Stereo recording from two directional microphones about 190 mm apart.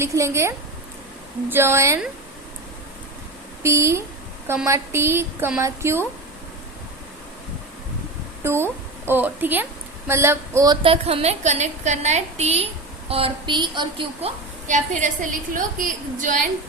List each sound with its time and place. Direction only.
0.0 s a woman's voice: 15° right (ahead or behind)
3.6 s a woman's voice: 15° right (ahead or behind)
8.4 s a woman's voice: 15° right (ahead or behind)
14.7 s a woman's voice: 40° right (ahead or behind)